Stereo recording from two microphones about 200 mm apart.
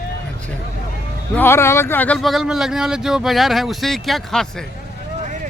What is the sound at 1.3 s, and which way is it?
Speech, 10° left (ahead or behind).